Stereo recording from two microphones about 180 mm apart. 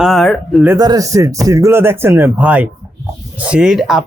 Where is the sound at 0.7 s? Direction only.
20° right (ahead or behind).